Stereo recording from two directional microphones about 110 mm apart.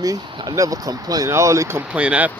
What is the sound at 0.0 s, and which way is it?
Speech, 35° right (ahead or behind).